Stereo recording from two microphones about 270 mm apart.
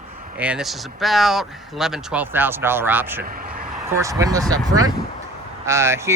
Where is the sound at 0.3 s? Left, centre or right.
Centre.